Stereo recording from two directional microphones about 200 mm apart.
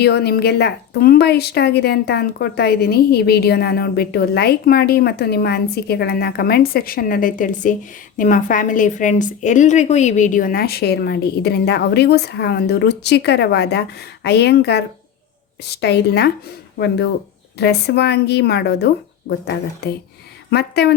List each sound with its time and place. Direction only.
0.0 s a woman's voice: 55° left (ahead or behind)